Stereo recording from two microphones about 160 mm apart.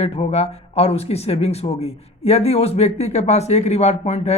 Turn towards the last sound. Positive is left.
turn(degrees=45)  # may be behind; listen again after turning